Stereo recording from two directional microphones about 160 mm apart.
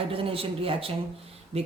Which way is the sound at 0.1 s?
35° right (ahead or behind).